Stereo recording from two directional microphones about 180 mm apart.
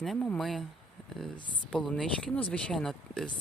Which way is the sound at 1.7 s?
5° left (ahead or behind).